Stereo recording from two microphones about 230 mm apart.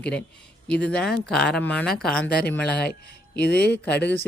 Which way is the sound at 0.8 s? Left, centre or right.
Centre.